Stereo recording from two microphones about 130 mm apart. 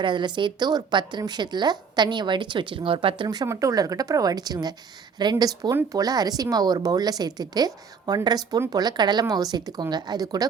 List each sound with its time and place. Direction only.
0.0 s a woman's voice: 35° right (ahead or behind)
3.2 s a woman's voice: 25° right (ahead or behind)